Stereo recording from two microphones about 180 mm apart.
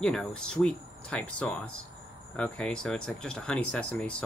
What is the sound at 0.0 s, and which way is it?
Speech, 5° left (ahead or behind).